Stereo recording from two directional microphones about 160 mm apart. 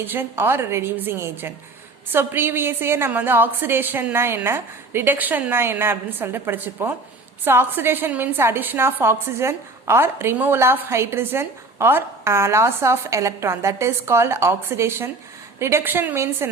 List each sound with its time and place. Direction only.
0.0 s a woman's voice: 15° right (ahead or behind)